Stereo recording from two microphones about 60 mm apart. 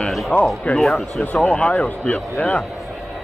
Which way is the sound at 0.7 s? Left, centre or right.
Centre.